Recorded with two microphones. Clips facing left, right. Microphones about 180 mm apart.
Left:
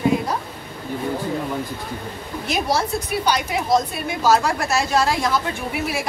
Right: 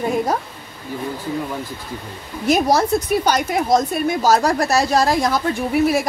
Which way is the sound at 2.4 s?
45° right (ahead or behind).